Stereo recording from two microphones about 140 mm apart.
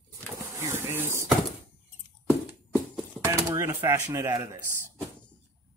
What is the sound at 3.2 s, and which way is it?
Speech, 20° right (ahead or behind).